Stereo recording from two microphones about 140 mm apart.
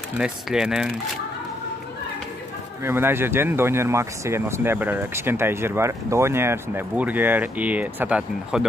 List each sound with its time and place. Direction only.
0.2 s speech: 5° right (ahead or behind)
2.8 s speech: 15° right (ahead or behind)